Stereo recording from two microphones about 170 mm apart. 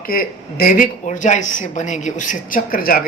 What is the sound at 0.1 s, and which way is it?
A woman's voice, 55° left (ahead or behind).